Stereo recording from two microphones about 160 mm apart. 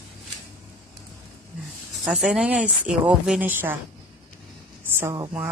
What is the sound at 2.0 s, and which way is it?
Speech, 5° right (ahead or behind).